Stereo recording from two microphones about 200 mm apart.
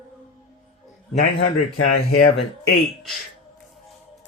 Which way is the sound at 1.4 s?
90° left.